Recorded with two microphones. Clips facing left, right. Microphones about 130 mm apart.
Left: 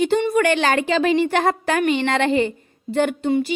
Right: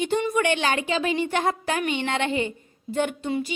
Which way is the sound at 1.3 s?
70° left (ahead or behind).